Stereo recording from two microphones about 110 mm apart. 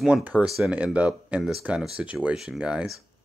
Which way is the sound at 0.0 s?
10° right (ahead or behind).